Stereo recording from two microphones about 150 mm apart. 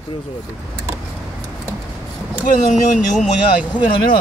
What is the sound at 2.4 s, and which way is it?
Speech, 65° left (ahead or behind).